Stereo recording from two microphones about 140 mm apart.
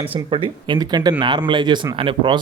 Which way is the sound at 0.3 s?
40° right (ahead or behind).